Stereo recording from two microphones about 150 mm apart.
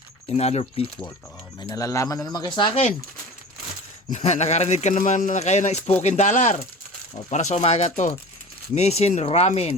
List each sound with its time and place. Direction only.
0.3 s speech: 45° left (ahead or behind)
1.6 s speech: 20° left (ahead or behind)
2.6 s speech: 35° left (ahead or behind)
4.1 s speech: 50° left (ahead or behind)